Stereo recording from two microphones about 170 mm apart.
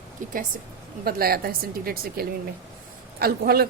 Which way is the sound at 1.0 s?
60° right (ahead or behind).